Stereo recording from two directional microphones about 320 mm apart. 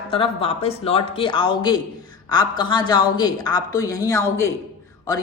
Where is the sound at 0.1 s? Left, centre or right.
Centre.